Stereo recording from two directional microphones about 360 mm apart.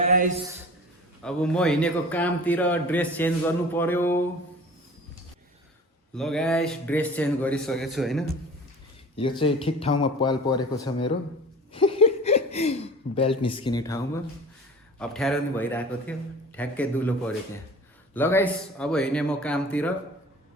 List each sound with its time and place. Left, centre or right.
0.0 s a man's voice: right
1.2 s a man's voice: centre
6.1 s a man's voice: centre
9.4 s a man's voice: centre
11.7 s a sound: centre
13.4 s a man's voice: centre